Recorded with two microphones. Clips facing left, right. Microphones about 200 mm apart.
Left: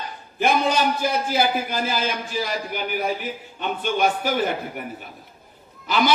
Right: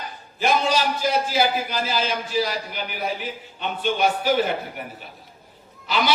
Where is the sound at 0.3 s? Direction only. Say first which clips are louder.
Left 1 dB; 55° left (ahead or behind).